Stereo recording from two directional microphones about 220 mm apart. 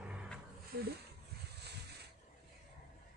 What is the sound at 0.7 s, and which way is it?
Speech, 45° right (ahead or behind).